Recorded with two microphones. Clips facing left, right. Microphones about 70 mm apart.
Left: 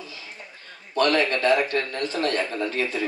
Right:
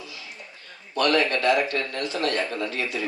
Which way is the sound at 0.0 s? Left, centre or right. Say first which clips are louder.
Left 1 dB; left.